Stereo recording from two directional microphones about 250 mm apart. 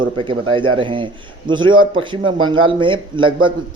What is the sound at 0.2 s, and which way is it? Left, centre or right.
Speech, centre.